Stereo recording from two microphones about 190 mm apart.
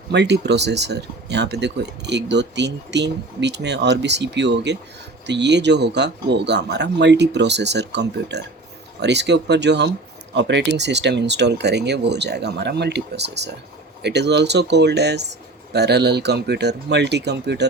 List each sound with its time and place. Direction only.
0.1 s speech: 65° right (ahead or behind)